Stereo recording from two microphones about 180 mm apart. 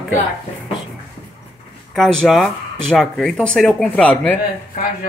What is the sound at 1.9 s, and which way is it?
Speech, 5° left (ahead or behind).